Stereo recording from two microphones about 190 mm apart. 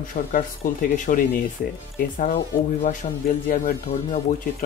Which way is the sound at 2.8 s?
45° left (ahead or behind).